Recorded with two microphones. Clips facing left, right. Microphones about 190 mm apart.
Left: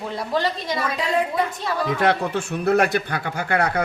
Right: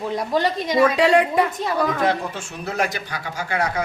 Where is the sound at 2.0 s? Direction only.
65° left (ahead or behind).